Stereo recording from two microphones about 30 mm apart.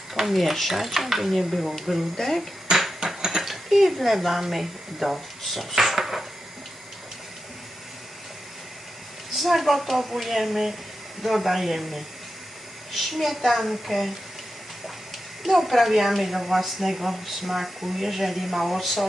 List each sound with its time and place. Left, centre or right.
0.1 s speech: centre
2.1 s speech: centre
3.0 s a sound: right
3.3 s speech: centre
5.4 s dishes: centre
9.3 s speech: centre
15.4 s speech: centre